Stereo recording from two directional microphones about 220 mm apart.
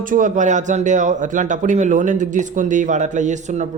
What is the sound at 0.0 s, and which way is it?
Speech, 35° right (ahead or behind).